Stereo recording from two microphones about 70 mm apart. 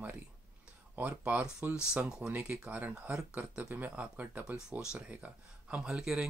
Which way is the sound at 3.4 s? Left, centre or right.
Right.